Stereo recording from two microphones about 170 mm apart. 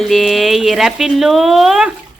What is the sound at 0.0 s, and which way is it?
A woman's voice, centre (ahead or behind).